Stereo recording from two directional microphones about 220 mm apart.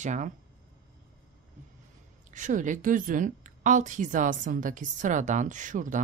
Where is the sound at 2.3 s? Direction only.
35° right (ahead or behind).